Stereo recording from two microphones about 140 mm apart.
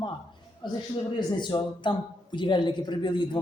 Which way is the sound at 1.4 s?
35° left (ahead or behind).